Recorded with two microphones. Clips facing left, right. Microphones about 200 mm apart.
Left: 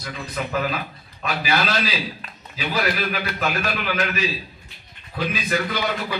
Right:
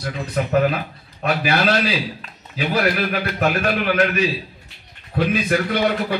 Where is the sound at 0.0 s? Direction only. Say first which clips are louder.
Right 6 dB; 55° right (ahead or behind).